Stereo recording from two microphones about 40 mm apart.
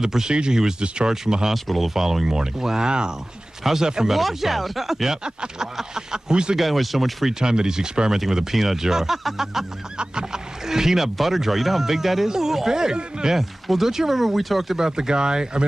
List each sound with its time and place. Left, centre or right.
0.0 s speech: centre
1.1 s speech: centre
4.1 s speech: centre
6.5 s speech: centre
7.3 s speech: centre
9.9 s speech: centre
13.4 s speech: centre
14.8 s speech: centre